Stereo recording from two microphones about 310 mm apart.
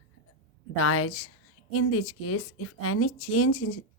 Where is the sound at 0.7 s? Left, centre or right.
Left.